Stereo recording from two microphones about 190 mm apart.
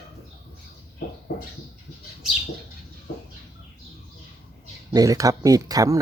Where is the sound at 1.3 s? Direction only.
50° left (ahead or behind).